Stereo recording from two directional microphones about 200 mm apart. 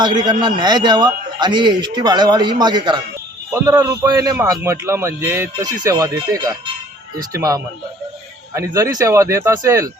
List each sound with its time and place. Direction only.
0.0 s a man's voice: 20° right (ahead or behind)